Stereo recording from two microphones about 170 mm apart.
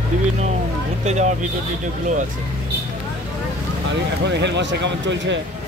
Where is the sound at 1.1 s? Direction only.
45° right (ahead or behind).